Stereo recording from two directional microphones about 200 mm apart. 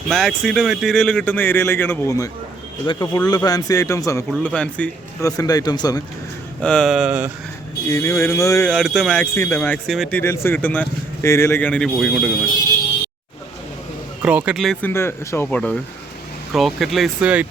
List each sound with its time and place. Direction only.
0.1 s a man's voice: centre (ahead or behind)
5.2 s a man's voice: 20° left (ahead or behind)
6.6 s speech: 5° left (ahead or behind)
7.9 s speech: 15° left (ahead or behind)
8.7 s speech: centre (ahead or behind)
9.3 s speech: 10° left (ahead or behind); by 12.3 s 5° right (ahead or behind)
14.2 s speech: 5° right (ahead or behind)